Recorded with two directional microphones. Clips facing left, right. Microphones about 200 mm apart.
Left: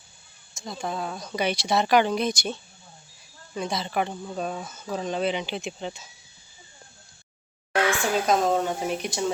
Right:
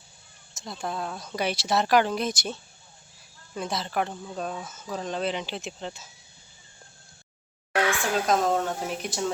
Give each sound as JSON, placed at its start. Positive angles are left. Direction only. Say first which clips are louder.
{"t": 0.5, "sound": "speech", "louder": "left 2 dB", "side_deg": 0}
{"t": 7.9, "sound": "speech", "louder": "left 2 dB", "side_deg": 0}